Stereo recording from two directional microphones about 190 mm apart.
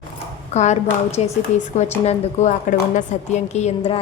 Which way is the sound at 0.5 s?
35° left (ahead or behind).